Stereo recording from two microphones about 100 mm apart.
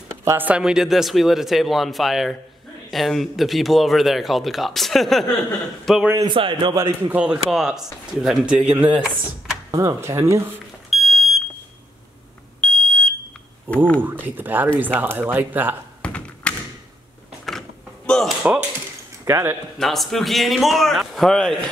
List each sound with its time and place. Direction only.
0.2 s a sound: 25° right (ahead or behind)
0.5 s speech: 5° right (ahead or behind)
6.2 s a man's voice: 55° right (ahead or behind)
6.7 s speech: 30° right (ahead or behind)
7.1 s a man's voice: 10° right (ahead or behind)
9.7 s speech: 35° right (ahead or behind)
10.9 s smoke detector: centre (ahead or behind)
12.5 s smoke detector: 10° left (ahead or behind)
13.7 s a man's voice: 20° right (ahead or behind)
16.0 s tap: 10° left (ahead or behind)
17.5 s door: 5° left (ahead or behind)
19.2 s speech: 25° right (ahead or behind)
19.8 s speech: 5° left (ahead or behind)